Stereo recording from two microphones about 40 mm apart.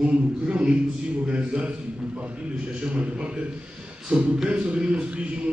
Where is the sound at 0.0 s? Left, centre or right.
Right.